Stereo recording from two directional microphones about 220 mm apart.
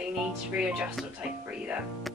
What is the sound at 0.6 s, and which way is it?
Speech, 5° right (ahead or behind).